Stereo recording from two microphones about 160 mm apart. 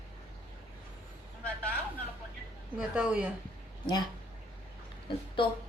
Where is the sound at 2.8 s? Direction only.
5° right (ahead or behind).